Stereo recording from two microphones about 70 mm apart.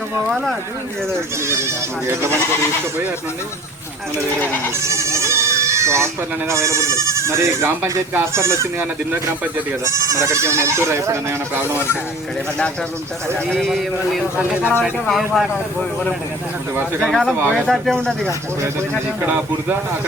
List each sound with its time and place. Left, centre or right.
1.5 s speech: right
4.9 s goat: right
6.5 s speech: right
9.8 s speech: right
13.5 s speech: centre
14.3 s speech: right
15.0 s speech: centre
17.1 s speech: centre